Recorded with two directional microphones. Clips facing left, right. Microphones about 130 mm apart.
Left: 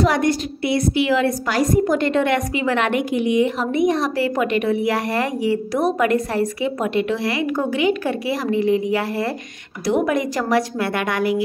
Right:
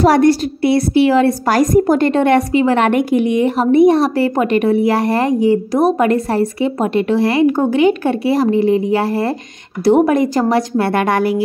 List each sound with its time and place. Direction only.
0.0 s a woman's voice: 35° right (ahead or behind)